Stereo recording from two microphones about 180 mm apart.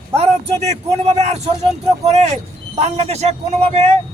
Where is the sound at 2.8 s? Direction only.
35° right (ahead or behind).